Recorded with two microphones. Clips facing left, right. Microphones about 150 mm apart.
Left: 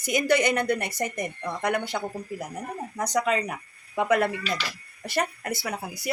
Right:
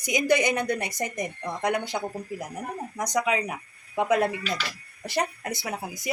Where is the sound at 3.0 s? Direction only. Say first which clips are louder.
Left 1 dB; 10° right (ahead or behind).